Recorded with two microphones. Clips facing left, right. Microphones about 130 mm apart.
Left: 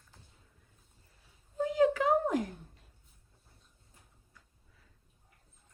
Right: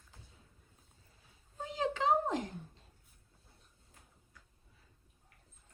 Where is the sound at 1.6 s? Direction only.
25° right (ahead or behind).